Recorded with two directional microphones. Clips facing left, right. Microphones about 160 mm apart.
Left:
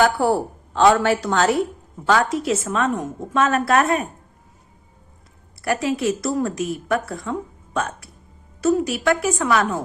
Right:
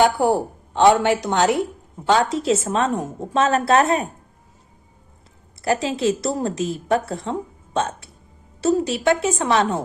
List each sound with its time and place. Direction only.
0.0 s a woman's voice: 20° right (ahead or behind)
5.6 s a woman's voice: 30° right (ahead or behind)